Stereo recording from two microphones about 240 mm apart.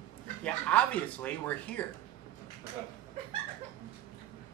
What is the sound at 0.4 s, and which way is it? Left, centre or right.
Speech, centre.